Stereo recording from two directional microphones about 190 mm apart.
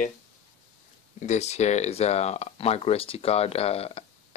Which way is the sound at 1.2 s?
35° left (ahead or behind).